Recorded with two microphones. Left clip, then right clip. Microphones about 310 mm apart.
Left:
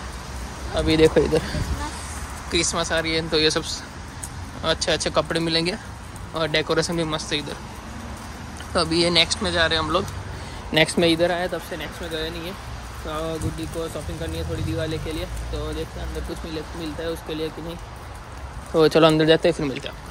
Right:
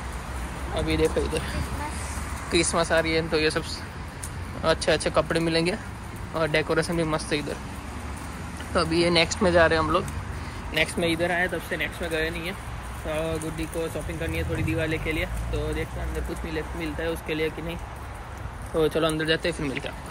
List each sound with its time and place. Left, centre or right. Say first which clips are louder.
0.7 s speech: left 7 dB; left
2.5 s speech: even; centre
8.7 s speech: left 3 dB; centre
10.7 s speech: left 6 dB; left; by 12.5 s centre
13.8 s speech: even; centre
16.5 s speech: right 1 dB; centre
18.8 s speech: left 8 dB; left